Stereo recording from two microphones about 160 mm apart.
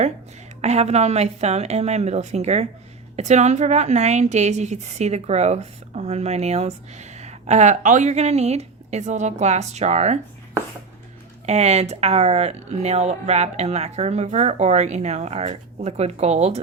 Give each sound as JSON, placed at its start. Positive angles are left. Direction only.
{"t": 0.6, "sound": "a woman's voice", "side_deg": -40}
{"t": 11.4, "sound": "a woman's voice", "side_deg": -45}